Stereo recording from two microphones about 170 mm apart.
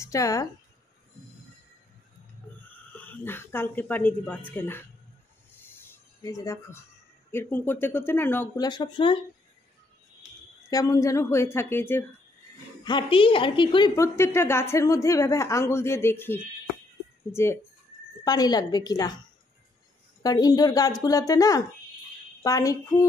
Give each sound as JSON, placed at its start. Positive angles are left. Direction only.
{"t": 0.0, "sound": "speech", "side_deg": 20}
{"t": 2.9, "sound": "a woman's voice", "side_deg": 10}
{"t": 8.5, "sound": "speech", "side_deg": 25}
{"t": 10.7, "sound": "a woman's voice", "side_deg": 20}
{"t": 12.8, "sound": "a woman's voice", "side_deg": 30}
{"t": 20.2, "sound": "speech", "side_deg": 20}